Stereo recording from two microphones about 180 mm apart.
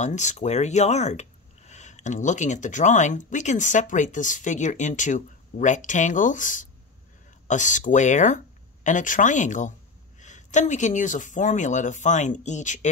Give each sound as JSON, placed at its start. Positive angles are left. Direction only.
{"t": 0.0, "sound": "speech", "side_deg": 40}